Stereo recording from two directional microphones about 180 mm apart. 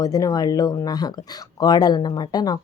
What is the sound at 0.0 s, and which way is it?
Speech, 20° left (ahead or behind).